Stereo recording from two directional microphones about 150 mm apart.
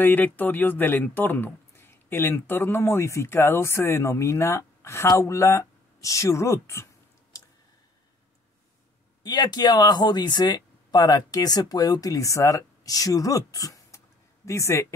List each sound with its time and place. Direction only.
0.0 s speech: 10° left (ahead or behind)
9.2 s speech: 30° left (ahead or behind)